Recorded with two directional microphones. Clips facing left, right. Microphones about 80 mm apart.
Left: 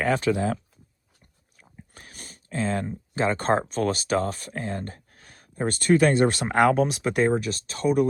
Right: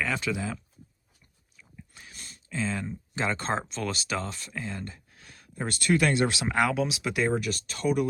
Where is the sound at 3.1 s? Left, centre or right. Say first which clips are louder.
Left 6 dB; left.